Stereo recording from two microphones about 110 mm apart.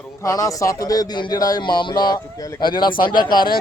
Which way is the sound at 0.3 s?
30° left (ahead or behind).